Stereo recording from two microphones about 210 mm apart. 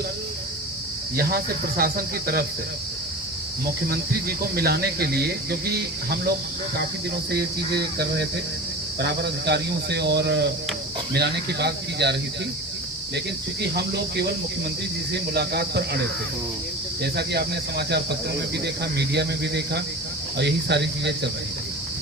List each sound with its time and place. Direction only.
1.1 s speech: 45° right (ahead or behind)
4.5 s speech: 50° right (ahead or behind)
13.1 s speech: 50° right (ahead or behind)
15.3 s speech: 50° right (ahead or behind)
17.0 s speech: 50° right (ahead or behind)